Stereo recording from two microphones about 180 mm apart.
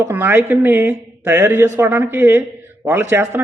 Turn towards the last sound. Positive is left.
turn(degrees=-15)  # may be behind; listen again after turning